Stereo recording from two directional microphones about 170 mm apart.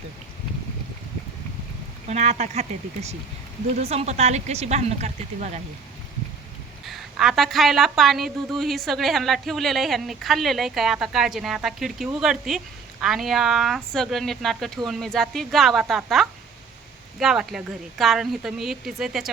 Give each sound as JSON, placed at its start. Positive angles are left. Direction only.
{"t": 2.0, "sound": "speech", "side_deg": -40}
{"t": 6.8, "sound": "a woman's voice", "side_deg": 0}